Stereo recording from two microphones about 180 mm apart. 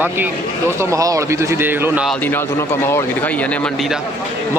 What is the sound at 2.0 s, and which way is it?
A man's voice, 10° left (ahead or behind).